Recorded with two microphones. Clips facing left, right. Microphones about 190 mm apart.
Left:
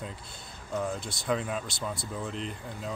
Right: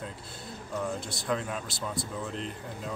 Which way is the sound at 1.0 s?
Centre (ahead or behind).